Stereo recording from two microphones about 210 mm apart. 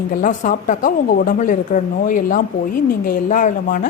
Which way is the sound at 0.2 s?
40° left (ahead or behind).